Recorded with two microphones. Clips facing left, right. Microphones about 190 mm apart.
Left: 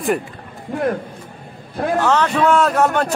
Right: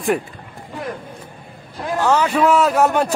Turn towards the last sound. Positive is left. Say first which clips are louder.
# right 1 dB
turn(degrees=-10)  # may be behind; listen again after turning